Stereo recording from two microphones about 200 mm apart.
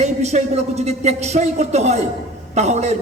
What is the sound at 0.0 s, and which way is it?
A man's voice, 35° right (ahead or behind).